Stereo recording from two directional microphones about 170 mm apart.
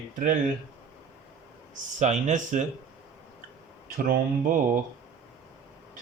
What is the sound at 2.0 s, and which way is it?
Speech, 45° right (ahead or behind).